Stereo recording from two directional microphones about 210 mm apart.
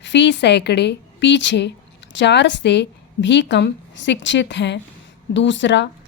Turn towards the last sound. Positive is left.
turn(degrees=60)  # may be behind; listen again after turning